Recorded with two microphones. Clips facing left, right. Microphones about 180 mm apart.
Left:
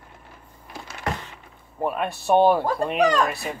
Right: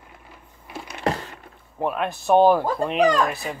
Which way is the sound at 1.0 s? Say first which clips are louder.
Right 5 dB; 40° right (ahead or behind).